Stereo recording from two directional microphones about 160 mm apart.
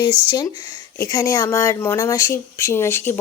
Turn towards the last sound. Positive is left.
turn(degrees=15)  # may be behind; listen again after turning